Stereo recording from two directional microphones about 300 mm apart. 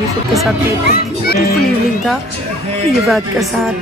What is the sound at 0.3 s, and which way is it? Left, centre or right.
Speech, centre.